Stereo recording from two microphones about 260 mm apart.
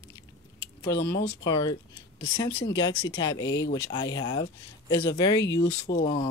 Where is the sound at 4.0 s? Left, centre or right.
Centre.